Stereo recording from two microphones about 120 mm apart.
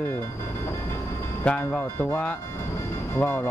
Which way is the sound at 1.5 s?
10° left (ahead or behind).